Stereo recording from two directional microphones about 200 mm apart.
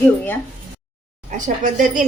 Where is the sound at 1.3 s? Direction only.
40° right (ahead or behind).